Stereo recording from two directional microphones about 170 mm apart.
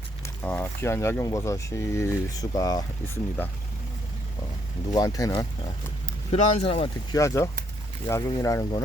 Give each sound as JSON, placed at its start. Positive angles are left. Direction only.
{"t": 0.4, "sound": "speech", "side_deg": 10}
{"t": 4.9, "sound": "speech", "side_deg": 20}
{"t": 6.3, "sound": "speech", "side_deg": 35}
{"t": 7.1, "sound": "speech", "side_deg": 20}